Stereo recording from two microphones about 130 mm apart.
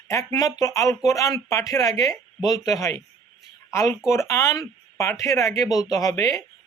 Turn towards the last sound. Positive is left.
turn(degrees=25)  # may be behind; listen again after turning